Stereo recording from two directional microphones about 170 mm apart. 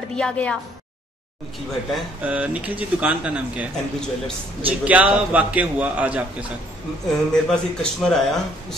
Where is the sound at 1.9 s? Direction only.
10° right (ahead or behind).